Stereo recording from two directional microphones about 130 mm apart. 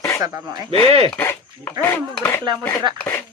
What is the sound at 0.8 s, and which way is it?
Speech, 50° right (ahead or behind).